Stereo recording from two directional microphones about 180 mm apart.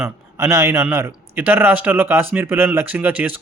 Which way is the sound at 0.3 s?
15° right (ahead or behind).